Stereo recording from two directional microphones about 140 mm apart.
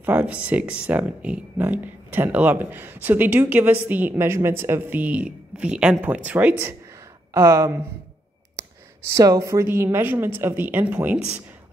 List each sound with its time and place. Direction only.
0.0 s speech: 10° right (ahead or behind)
9.1 s speech: 20° right (ahead or behind)